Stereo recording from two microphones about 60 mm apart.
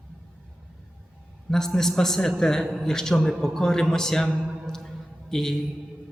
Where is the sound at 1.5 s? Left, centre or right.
Centre.